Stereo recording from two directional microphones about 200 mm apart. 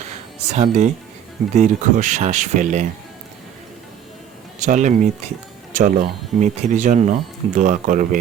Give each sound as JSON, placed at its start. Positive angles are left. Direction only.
{"t": 0.5, "sound": "speech", "side_deg": -35}
{"t": 4.6, "sound": "speech", "side_deg": -35}